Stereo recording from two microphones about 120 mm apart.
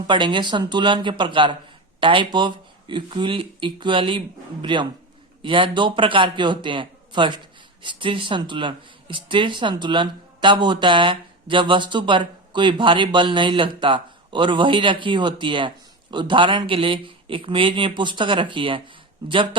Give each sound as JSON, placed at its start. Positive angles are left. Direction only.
{"t": 0.1, "sound": "a man's voice", "side_deg": -40}